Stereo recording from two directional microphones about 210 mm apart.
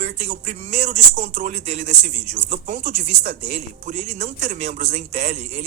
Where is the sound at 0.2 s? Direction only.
30° right (ahead or behind).